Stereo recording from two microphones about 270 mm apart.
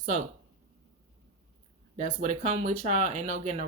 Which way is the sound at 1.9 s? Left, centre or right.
Right.